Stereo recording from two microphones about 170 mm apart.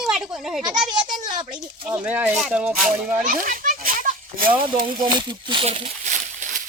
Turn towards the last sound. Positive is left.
turn(degrees=-45)  # may be behind; listen again after turning